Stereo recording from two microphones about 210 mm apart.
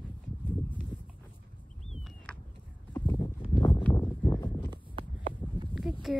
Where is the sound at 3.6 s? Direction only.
20° left (ahead or behind).